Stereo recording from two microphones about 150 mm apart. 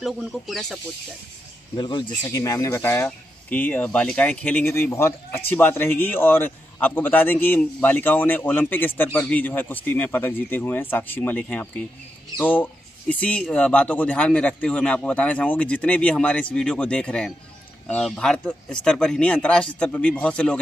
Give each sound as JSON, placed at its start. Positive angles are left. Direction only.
{"t": 0.0, "sound": "speech", "side_deg": 0}
{"t": 1.8, "sound": "speech", "side_deg": 30}
{"t": 2.2, "sound": "speech", "side_deg": 20}